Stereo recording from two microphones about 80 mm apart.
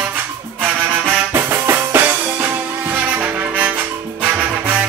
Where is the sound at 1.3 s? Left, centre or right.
Right.